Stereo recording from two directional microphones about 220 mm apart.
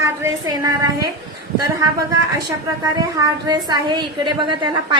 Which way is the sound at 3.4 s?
20° right (ahead or behind).